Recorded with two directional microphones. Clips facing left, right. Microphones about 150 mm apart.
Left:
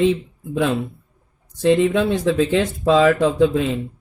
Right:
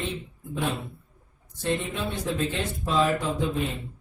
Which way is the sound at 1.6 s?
90° left.